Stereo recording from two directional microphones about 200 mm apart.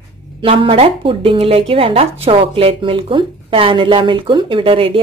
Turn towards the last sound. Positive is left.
turn(degrees=-25)  # may be behind; listen again after turning